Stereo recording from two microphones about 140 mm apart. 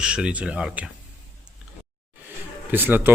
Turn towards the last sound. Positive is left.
turn(degrees=-15)  # may be behind; listen again after turning